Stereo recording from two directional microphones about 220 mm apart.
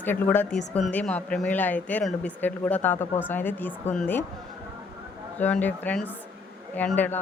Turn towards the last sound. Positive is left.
turn(degrees=10)  # may be behind; listen again after turning